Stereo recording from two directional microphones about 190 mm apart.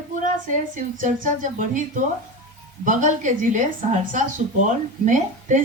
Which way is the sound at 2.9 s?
40° right (ahead or behind).